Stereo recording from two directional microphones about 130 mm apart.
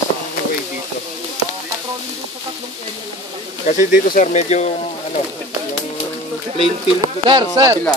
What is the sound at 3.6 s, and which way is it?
Speech, 85° left.